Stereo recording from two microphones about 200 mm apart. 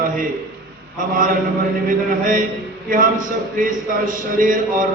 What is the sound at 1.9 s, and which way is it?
Speech, 40° right (ahead or behind).